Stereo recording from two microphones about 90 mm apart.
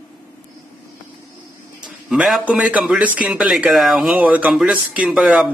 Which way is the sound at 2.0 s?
5° right (ahead or behind).